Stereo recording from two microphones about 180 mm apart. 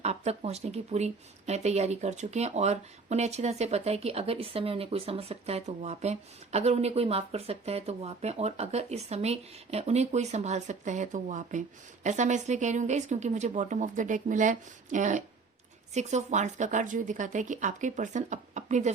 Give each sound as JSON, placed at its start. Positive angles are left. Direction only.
{"t": 0.0, "sound": "a woman's voice", "side_deg": -35}